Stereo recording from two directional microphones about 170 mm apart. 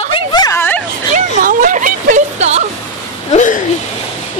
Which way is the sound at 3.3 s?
45° left (ahead or behind).